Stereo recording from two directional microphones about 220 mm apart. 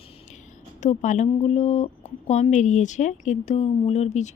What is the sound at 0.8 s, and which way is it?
Speech, 35° left (ahead or behind).